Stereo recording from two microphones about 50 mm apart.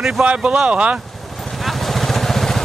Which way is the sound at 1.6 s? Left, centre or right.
Centre.